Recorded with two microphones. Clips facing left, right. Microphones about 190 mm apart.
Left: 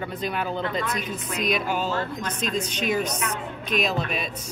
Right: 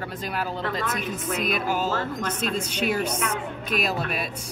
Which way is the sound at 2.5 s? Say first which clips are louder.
Left 2 dB; 10° right (ahead or behind).